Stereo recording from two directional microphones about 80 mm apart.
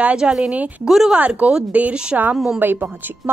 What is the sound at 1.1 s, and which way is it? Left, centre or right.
Speech, centre.